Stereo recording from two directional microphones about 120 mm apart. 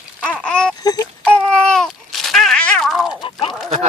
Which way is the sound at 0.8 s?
30° left (ahead or behind).